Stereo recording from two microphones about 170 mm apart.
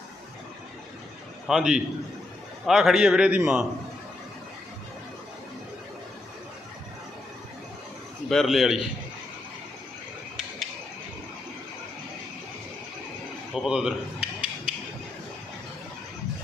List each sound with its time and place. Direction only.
1.5 s a man's voice: 5° right (ahead or behind)
8.3 s a man's voice: centre (ahead or behind)
13.5 s a sound: 5° right (ahead or behind)